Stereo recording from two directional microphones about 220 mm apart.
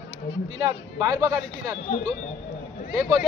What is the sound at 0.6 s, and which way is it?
Speech, 15° right (ahead or behind).